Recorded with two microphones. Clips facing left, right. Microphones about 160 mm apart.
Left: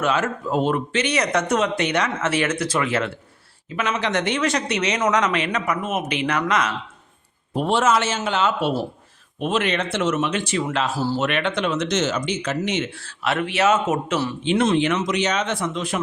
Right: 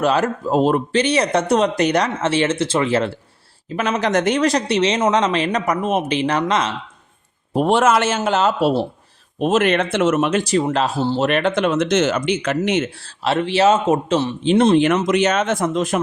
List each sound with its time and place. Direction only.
0.0 s speech: 35° right (ahead or behind)
7.5 s speech: 50° right (ahead or behind); by 8.9 s 30° right (ahead or behind)
9.4 s speech: 45° right (ahead or behind)
10.9 s speech: 25° right (ahead or behind)
11.3 s speech: 40° right (ahead or behind)
12.9 s speech: 35° right (ahead or behind)
14.8 s speech: 50° right (ahead or behind)